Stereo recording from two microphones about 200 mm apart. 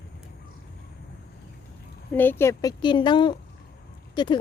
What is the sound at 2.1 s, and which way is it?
Speech, 10° left (ahead or behind).